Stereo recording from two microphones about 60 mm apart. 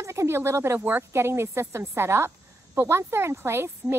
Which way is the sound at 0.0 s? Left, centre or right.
Right.